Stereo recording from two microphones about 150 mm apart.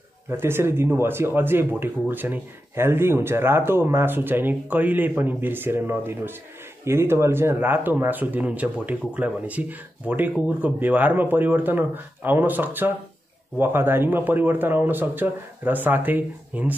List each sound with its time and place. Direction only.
0.3 s speech: 15° right (ahead or behind)